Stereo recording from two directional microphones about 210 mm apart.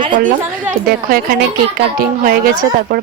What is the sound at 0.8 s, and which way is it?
A woman's voice, 45° right (ahead or behind).